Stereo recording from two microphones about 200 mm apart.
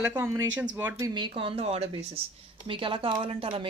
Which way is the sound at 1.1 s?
25° right (ahead or behind).